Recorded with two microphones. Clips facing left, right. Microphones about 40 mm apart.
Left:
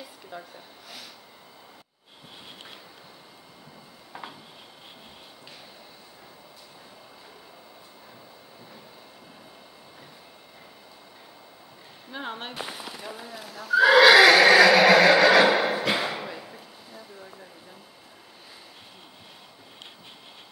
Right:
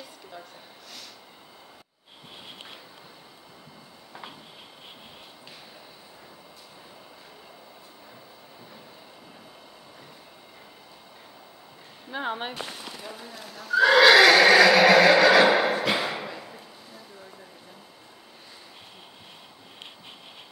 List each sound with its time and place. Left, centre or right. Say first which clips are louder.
0.0 s a sound: left 2 dB; centre
12.1 s speech: right 4 dB; centre
12.5 s horse: left 1 dB; centre